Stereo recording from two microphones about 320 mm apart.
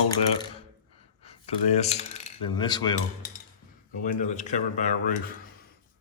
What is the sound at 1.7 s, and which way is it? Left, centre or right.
A man's voice, centre.